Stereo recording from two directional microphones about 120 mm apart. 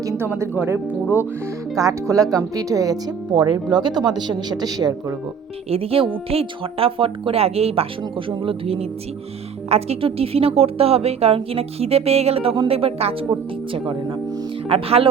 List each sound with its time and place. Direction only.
0.0 s music: 25° right (ahead or behind)
0.3 s speech: 20° right (ahead or behind); by 5.1 s 35° right (ahead or behind)
5.7 s a woman's voice: 55° right (ahead or behind)
14.7 s speech: 55° right (ahead or behind)